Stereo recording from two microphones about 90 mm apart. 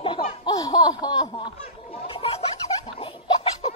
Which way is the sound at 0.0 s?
90° left.